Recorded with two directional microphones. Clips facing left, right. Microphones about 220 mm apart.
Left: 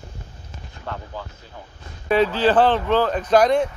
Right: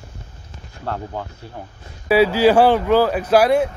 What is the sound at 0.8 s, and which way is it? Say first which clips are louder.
Speech: right 6 dB; 60° right (ahead or behind).